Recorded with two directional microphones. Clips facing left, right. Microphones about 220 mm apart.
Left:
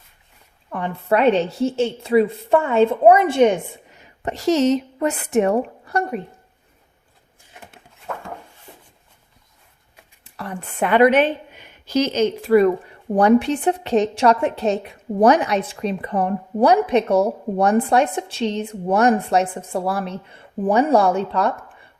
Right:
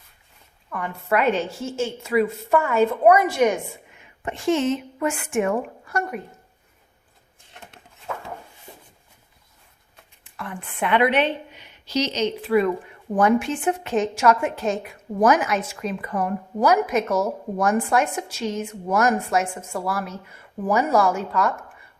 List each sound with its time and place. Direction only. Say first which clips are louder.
0.7 s a woman's voice: left 4 dB; 30° left (ahead or behind)
7.5 s a sound: left 1 dB; 5° left (ahead or behind)
10.3 s a woman's voice: left 4 dB; 40° left (ahead or behind)